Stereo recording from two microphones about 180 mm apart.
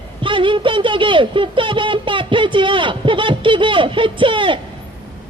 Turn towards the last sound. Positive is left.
turn(degrees=-30)  # may be behind; listen again after turning